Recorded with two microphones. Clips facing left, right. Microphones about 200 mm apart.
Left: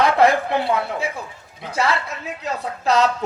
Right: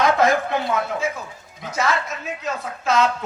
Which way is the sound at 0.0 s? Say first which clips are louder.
Left 2 dB; 30° left (ahead or behind).